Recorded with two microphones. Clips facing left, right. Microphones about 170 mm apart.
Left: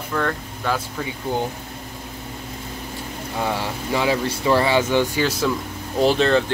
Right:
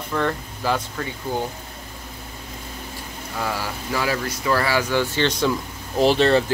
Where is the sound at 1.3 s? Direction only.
20° left (ahead or behind).